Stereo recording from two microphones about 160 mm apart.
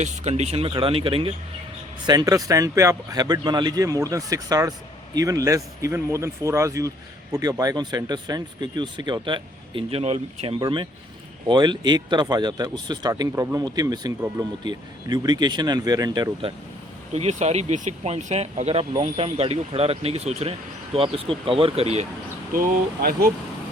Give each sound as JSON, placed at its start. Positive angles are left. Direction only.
{"t": 0.0, "sound": "speech", "side_deg": -45}
{"t": 2.0, "sound": "a man's voice", "side_deg": -25}
{"t": 11.4, "sound": "a man's voice", "side_deg": -30}
{"t": 17.2, "sound": "speech", "side_deg": -45}
{"t": 22.5, "sound": "speech", "side_deg": -70}